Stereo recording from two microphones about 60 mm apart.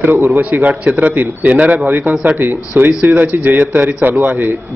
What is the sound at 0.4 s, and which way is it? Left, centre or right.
A man's voice, right.